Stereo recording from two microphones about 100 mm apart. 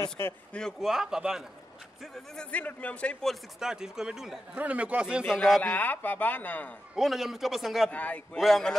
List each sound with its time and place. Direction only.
0.5 s a man's voice: 5° left (ahead or behind)
0.8 s a man's voice: 5° right (ahead or behind)
2.1 s a man's voice: 10° left (ahead or behind)
3.5 s a man's voice: 5° right (ahead or behind)
4.6 s speech: 15° right (ahead or behind)
5.6 s a man's voice: 20° left (ahead or behind)
7.0 s a man's voice: centre (ahead or behind)
7.9 s a man's voice: 15° left (ahead or behind)
8.4 s a man's voice: centre (ahead or behind)